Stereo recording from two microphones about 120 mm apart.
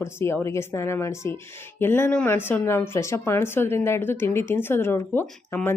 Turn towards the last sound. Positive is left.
turn(degrees=20)  # may be behind; listen again after turning